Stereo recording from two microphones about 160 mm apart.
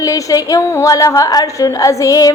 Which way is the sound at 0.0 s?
20° left (ahead or behind).